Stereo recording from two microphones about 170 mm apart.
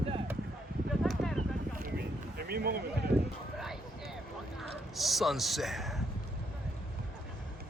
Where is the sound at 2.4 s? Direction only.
65° right (ahead or behind).